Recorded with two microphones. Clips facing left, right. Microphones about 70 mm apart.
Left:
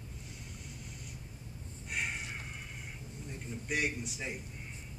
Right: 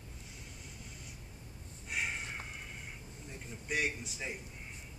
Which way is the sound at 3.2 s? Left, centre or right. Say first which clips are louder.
Left 2 dB; centre.